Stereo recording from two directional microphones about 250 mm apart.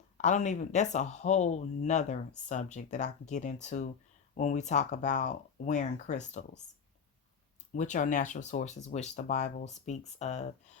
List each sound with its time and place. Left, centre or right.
0.2 s speech: left
7.7 s speech: left